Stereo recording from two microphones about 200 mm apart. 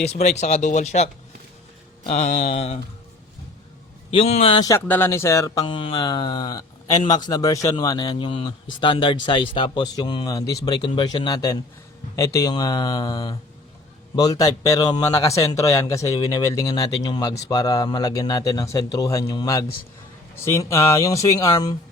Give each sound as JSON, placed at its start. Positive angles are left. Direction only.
{"t": 0.3, "sound": "speech", "side_deg": 35}
{"t": 4.1, "sound": "a man's voice", "side_deg": 30}